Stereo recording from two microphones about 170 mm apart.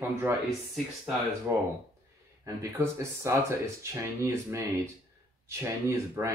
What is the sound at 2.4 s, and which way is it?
Speech, 15° right (ahead or behind).